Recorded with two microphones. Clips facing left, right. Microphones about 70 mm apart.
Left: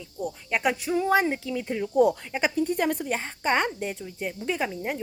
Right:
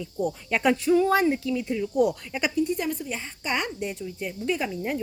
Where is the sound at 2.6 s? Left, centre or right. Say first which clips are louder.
Left 2 dB; left.